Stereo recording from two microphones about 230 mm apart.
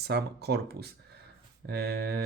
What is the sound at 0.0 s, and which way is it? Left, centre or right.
Speech, right.